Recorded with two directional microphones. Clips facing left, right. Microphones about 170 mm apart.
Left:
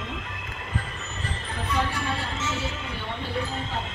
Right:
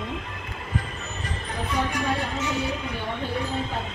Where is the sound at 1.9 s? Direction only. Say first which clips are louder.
Right 4 dB; 15° right (ahead or behind).